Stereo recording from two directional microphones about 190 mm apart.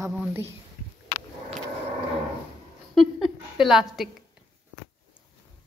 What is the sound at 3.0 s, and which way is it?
A woman's voice, centre (ahead or behind).